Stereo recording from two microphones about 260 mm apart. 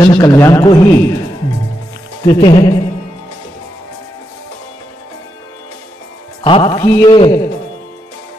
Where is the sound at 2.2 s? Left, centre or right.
Centre.